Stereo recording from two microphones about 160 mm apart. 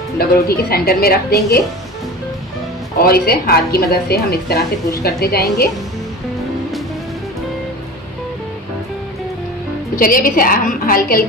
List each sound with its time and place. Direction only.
0.5 s a woman's voice: 70° left (ahead or behind)
3.0 s a woman's voice: 70° left (ahead or behind)
9.9 s a woman's voice: 60° left (ahead or behind)